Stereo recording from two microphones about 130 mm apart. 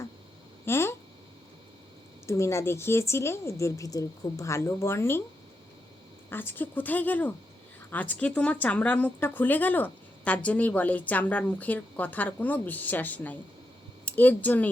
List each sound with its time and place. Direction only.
0.6 s a sound: 20° left (ahead or behind)
2.2 s a woman's voice: 20° left (ahead or behind)
6.3 s a woman's voice: 15° left (ahead or behind)